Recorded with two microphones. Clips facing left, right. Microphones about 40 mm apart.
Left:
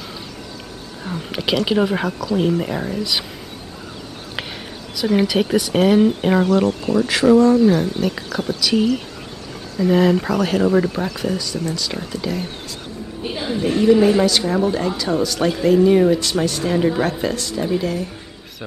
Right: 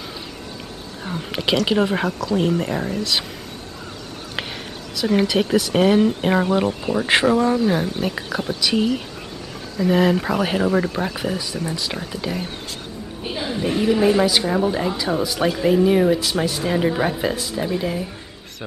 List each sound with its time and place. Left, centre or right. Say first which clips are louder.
1.0 s speech: even; centre
4.9 s speech: left 1 dB; centre
6.5 s speech: left 3 dB; centre
7.7 s speech: left 2 dB; centre
11.1 s speech: left 2 dB; centre
13.2 s a woman's voice: left 2 dB; centre